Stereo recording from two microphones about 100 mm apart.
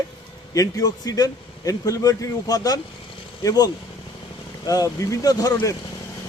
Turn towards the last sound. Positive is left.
turn(degrees=35)  # may be behind; listen again after turning